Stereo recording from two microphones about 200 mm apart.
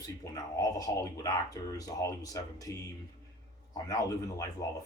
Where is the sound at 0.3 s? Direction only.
15° left (ahead or behind).